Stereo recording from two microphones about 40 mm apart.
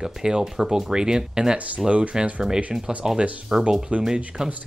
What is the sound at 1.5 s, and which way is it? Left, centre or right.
Speech, right.